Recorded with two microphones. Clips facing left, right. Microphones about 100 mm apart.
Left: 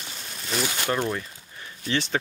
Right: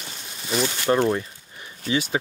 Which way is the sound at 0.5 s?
5° right (ahead or behind).